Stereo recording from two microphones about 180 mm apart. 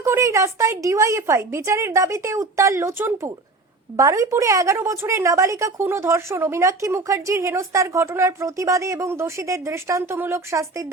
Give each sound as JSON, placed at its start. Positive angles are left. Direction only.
{"t": 0.0, "sound": "a woman's voice", "side_deg": -15}